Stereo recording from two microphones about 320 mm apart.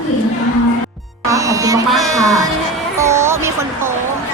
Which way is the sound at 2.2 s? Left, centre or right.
Centre.